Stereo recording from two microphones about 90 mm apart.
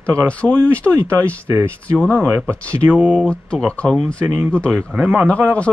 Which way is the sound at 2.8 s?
15° right (ahead or behind).